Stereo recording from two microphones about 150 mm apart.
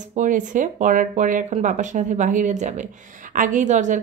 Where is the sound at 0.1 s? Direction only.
55° right (ahead or behind).